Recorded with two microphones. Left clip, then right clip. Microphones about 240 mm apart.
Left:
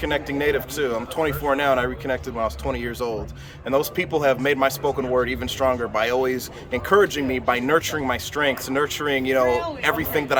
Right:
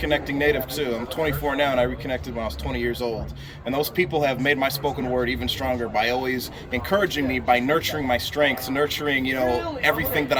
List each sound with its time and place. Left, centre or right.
0.0 s speech: centre